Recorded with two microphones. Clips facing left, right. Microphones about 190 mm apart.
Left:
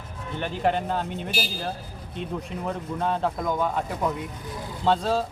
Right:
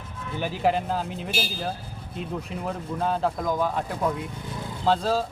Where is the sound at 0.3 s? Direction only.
5° right (ahead or behind).